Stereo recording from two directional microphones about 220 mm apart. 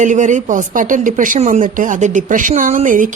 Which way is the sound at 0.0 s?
35° right (ahead or behind).